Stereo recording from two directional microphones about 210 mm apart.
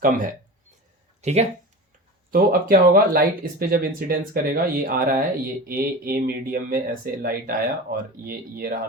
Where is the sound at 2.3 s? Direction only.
45° right (ahead or behind).